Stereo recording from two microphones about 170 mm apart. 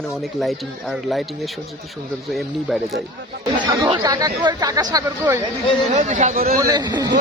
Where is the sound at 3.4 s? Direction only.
25° right (ahead or behind).